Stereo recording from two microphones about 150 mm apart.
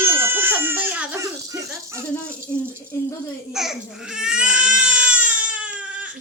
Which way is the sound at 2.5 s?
15° left (ahead or behind).